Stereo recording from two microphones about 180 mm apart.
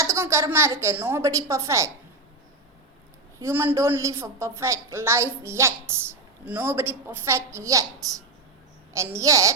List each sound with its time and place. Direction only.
0.0 s a woman's voice: 15° right (ahead or behind)
3.4 s a woman's voice: 10° right (ahead or behind)